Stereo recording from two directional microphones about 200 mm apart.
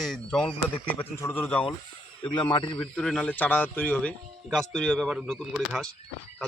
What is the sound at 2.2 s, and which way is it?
Speech, 25° left (ahead or behind).